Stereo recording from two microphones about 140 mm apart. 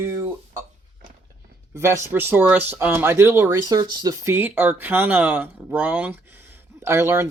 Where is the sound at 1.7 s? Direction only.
20° right (ahead or behind).